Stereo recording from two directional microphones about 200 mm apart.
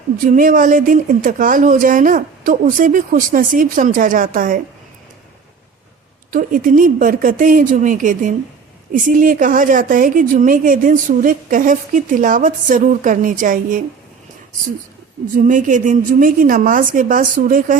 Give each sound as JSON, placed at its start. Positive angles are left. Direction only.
{"t": 0.3, "sound": "speech", "side_deg": -45}
{"t": 6.3, "sound": "a woman's voice", "side_deg": -40}
{"t": 15.4, "sound": "a woman's voice", "side_deg": -40}